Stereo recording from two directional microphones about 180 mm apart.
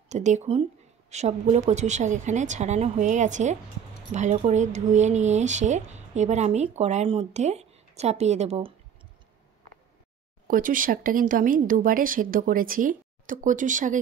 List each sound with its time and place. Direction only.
0.1 s speech: 40° right (ahead or behind)
10.4 s speech: 50° right (ahead or behind)